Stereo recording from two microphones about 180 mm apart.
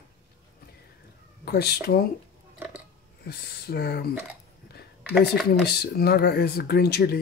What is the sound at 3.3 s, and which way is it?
Speech, 65° left (ahead or behind).